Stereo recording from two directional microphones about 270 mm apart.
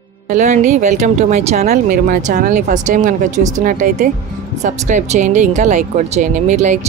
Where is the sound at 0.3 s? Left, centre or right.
Right.